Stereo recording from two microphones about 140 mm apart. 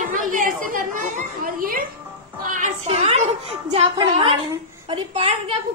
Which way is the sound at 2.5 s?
60° right (ahead or behind).